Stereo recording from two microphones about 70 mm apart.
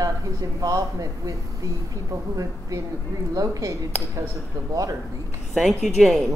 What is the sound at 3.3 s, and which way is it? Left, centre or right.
Speech, right.